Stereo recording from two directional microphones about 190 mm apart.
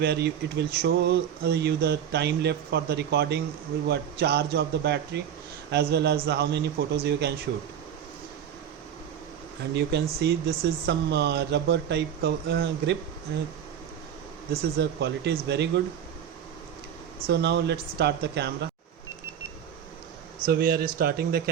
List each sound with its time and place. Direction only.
0.0 s speech: 60° right (ahead or behind)
9.7 s speech: 60° right (ahead or behind)
14.5 s speech: 65° right (ahead or behind)
17.2 s speech: 60° right (ahead or behind)
20.4 s speech: 50° right (ahead or behind)